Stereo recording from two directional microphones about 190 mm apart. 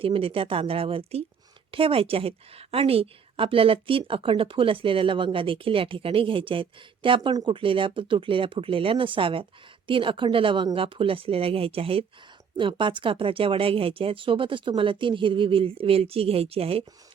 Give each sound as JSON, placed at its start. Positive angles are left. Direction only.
{"t": 0.0, "sound": "a woman's voice", "side_deg": -30}